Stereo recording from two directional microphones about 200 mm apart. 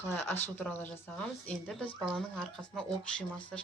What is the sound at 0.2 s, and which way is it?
Speech, 10° left (ahead or behind).